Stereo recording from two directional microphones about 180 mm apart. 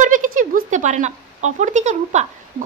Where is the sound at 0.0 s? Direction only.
45° right (ahead or behind).